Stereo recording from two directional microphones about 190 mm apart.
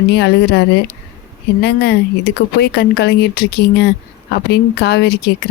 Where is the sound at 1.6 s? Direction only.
60° left (ahead or behind).